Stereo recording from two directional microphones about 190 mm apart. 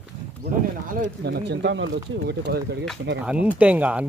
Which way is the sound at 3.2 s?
5° right (ahead or behind).